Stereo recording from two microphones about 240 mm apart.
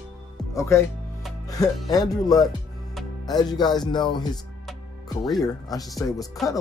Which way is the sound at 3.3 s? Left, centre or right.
Centre.